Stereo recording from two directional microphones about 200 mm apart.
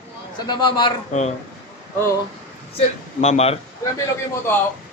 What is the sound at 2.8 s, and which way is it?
Speech, 35° left (ahead or behind).